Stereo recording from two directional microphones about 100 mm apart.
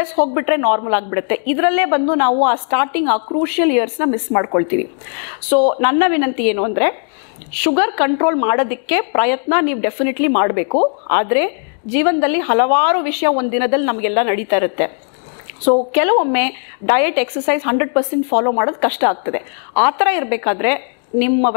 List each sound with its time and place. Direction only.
0.0 s a woman's voice: 20° left (ahead or behind)
3.2 s a woman's voice: 30° left (ahead or behind)
3.4 s a woman's voice: 15° left (ahead or behind)
5.7 s a woman's voice: 15° left (ahead or behind)
15.9 s a woman's voice: 20° left (ahead or behind)